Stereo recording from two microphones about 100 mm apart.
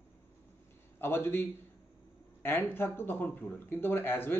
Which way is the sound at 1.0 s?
25° left (ahead or behind).